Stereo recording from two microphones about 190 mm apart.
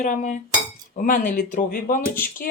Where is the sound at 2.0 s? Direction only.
10° left (ahead or behind).